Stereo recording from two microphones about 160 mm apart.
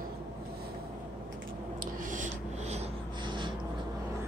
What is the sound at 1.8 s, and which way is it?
Writing, 55° right (ahead or behind).